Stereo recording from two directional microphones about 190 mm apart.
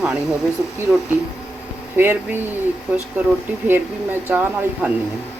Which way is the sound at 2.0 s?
10° right (ahead or behind).